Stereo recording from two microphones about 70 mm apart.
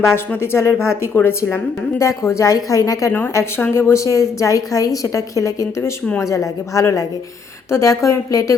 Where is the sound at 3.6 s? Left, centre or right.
Left.